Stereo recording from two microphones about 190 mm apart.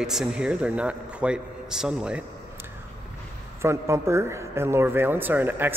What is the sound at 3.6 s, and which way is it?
Speech, 15° right (ahead or behind).